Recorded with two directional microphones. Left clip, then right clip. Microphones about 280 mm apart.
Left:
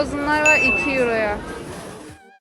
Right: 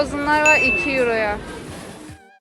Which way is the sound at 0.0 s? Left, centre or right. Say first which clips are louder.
Right 1 dB; centre.